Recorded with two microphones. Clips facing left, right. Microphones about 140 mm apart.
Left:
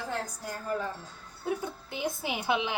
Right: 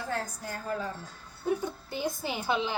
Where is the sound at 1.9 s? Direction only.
20° left (ahead or behind).